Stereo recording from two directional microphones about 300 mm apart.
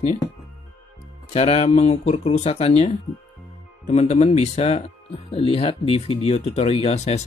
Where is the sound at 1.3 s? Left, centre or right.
Centre.